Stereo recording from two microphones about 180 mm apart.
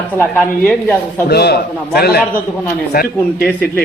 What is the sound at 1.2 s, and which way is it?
A man's voice, 65° left (ahead or behind).